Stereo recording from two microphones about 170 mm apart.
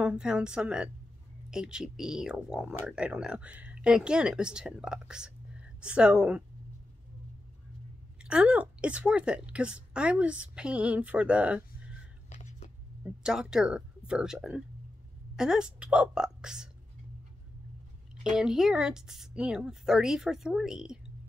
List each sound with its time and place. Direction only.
0.0 s speech: 5° right (ahead or behind)
8.2 s a woman's voice: 5° right (ahead or behind)
12.3 s a sound: 45° left (ahead or behind)
13.0 s speech: 5° right (ahead or behind)
18.3 s speech: 5° right (ahead or behind)